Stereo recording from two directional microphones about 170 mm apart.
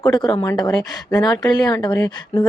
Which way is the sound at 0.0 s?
25° left (ahead or behind).